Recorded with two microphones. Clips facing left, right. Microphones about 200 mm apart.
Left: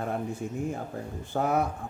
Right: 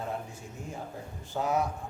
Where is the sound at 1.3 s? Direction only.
55° left (ahead or behind).